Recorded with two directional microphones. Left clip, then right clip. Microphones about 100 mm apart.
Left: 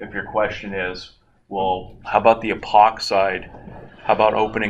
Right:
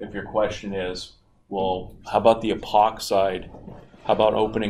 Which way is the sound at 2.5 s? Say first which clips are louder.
Left 5 dB; 25° left (ahead or behind).